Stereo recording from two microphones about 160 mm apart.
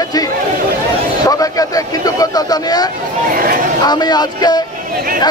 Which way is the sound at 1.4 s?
20° left (ahead or behind).